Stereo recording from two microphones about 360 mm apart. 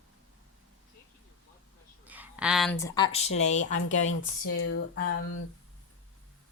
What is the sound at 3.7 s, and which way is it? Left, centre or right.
Speech, left.